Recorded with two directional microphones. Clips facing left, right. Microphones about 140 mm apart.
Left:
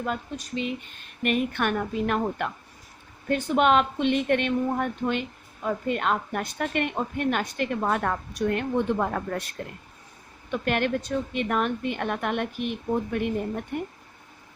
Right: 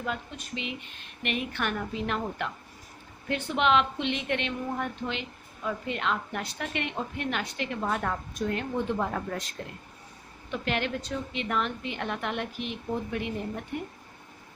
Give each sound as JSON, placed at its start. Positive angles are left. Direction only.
{"t": 0.0, "sound": "a woman's voice", "side_deg": 40}
{"t": 10.5, "sound": "a woman's voice", "side_deg": 50}